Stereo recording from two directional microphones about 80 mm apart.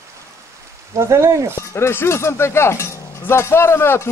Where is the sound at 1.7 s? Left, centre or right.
Left.